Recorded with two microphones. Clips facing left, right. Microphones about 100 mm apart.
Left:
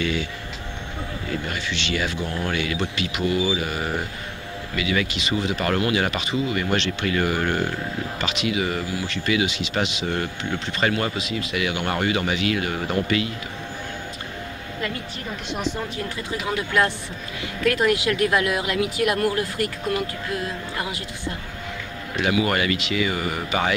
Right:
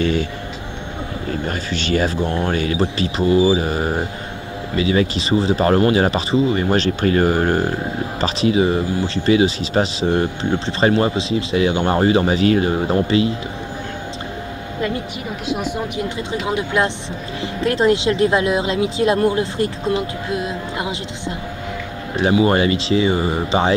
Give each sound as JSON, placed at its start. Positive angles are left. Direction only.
{"t": 0.0, "sound": "music", "side_deg": -40}
{"t": 1.3, "sound": "speech", "side_deg": -40}
{"t": 15.4, "sound": "speech", "side_deg": -5}
{"t": 16.3, "sound": "speech", "side_deg": -20}
{"t": 22.1, "sound": "speech", "side_deg": -30}